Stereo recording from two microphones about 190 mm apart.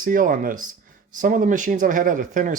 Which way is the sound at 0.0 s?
45° right (ahead or behind).